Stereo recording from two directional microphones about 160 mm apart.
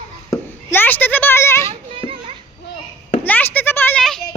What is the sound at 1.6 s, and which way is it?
Children playing, 35° right (ahead or behind).